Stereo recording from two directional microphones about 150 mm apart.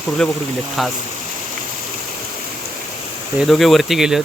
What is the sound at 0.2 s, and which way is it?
Speech, 5° left (ahead or behind).